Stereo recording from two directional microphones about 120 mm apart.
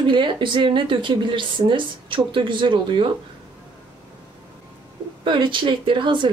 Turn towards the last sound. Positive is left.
turn(degrees=-45)  # may be behind; listen again after turning